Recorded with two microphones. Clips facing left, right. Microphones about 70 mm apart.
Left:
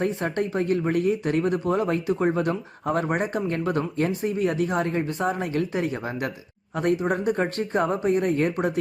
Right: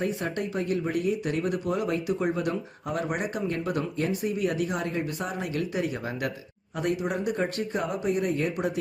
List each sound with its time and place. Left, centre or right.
0.0 s speech: left